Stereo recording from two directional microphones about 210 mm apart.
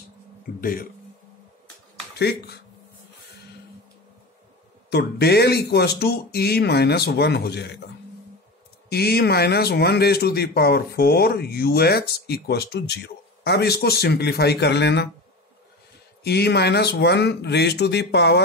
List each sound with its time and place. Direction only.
0.6 s a man's voice: 45° left (ahead or behind)
2.1 s speech: 50° left (ahead or behind)
4.8 s speech: 50° left (ahead or behind)
8.9 s speech: 50° left (ahead or behind)
16.3 s speech: 50° left (ahead or behind)